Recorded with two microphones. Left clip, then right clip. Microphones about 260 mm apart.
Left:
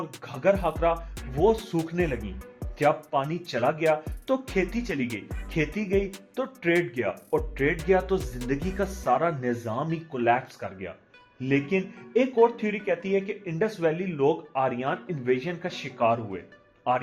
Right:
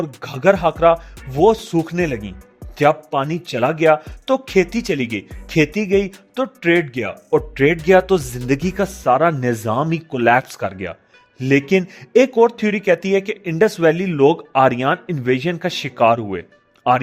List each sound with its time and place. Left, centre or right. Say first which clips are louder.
0.2 s speech: right 9 dB; right